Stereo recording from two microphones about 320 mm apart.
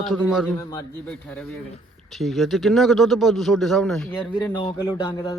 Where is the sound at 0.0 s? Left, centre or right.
Centre.